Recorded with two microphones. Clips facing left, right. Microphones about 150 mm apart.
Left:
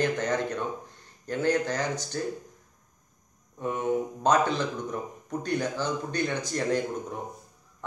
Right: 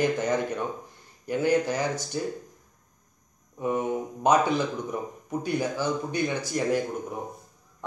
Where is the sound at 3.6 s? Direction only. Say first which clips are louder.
Even; 10° right (ahead or behind).